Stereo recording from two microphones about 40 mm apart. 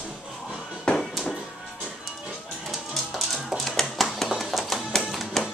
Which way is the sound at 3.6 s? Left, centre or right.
Centre.